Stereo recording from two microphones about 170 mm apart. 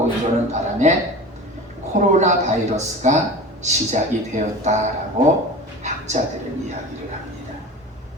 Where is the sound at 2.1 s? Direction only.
45° right (ahead or behind).